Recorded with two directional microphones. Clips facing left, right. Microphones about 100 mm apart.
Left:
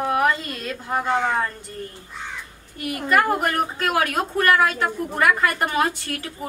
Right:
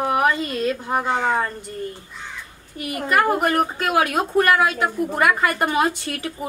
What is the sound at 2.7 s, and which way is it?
A woman's voice, 20° right (ahead or behind).